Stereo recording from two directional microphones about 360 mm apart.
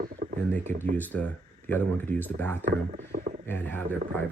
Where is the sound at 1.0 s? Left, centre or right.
Centre.